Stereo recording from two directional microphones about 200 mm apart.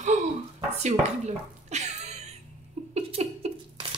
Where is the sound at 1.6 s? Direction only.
35° right (ahead or behind).